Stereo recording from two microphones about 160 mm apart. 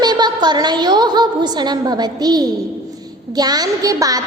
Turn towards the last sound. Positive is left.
turn(degrees=-20)  # may be behind; listen again after turning